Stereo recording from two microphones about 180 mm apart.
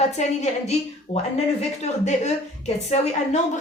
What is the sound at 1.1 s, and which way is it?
A woman's voice, 35° left (ahead or behind).